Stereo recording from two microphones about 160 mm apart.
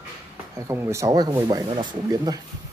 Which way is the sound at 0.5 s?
15° right (ahead or behind).